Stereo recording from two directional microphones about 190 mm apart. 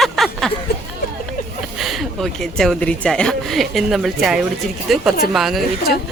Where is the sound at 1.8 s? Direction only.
Centre (ahead or behind).